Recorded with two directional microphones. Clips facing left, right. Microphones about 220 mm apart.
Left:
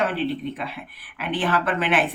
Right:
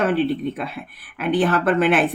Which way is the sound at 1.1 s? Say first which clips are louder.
Right 5 dB; 45° right (ahead or behind).